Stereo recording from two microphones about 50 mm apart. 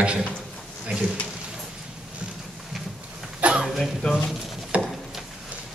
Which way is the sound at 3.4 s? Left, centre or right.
Right.